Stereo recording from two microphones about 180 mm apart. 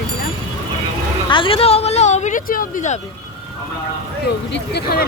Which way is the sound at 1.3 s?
30° left (ahead or behind).